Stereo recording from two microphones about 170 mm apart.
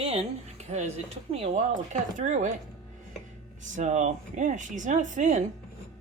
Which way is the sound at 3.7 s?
40° right (ahead or behind).